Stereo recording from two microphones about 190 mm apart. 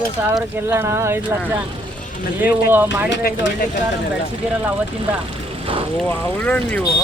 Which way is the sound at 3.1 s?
70° left (ahead or behind).